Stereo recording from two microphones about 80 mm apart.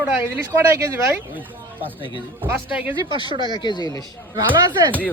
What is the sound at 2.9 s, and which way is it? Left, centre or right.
Speech, right.